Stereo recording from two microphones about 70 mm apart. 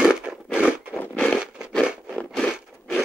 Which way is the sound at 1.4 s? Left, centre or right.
Centre.